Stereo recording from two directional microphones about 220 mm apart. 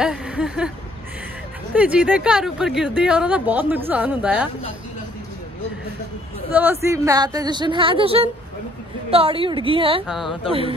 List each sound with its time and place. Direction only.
0.0 s a sound: 5° right (ahead or behind)
1.7 s speech: 5° right (ahead or behind)
6.5 s speech: 10° right (ahead or behind)
10.0 s speech: centre (ahead or behind)